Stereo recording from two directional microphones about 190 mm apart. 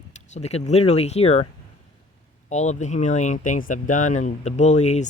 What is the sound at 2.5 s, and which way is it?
Speech, 40° left (ahead or behind).